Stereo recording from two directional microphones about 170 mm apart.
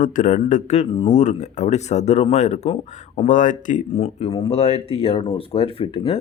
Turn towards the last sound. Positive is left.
turn(degrees=35)  # may be behind; listen again after turning